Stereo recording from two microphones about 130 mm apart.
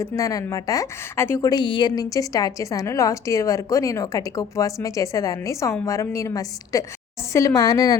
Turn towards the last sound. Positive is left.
turn(degrees=30)  # may be behind; listen again after turning